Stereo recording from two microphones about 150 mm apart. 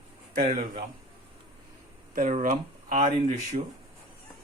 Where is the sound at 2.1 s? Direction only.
60° right (ahead or behind).